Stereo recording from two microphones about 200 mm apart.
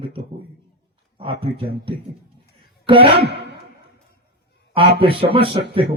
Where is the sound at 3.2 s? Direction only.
55° right (ahead or behind).